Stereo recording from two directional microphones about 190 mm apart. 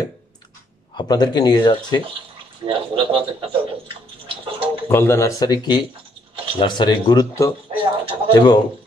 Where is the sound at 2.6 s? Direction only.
30° right (ahead or behind).